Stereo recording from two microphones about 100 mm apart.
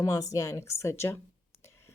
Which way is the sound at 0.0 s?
35° left (ahead or behind).